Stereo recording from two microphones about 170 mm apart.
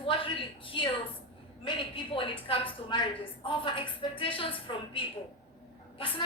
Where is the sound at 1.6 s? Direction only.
30° left (ahead or behind).